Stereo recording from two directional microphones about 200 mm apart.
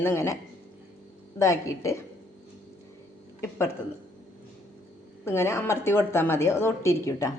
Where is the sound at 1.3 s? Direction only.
15° left (ahead or behind).